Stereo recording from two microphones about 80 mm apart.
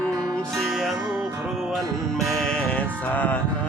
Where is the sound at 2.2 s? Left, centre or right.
Centre.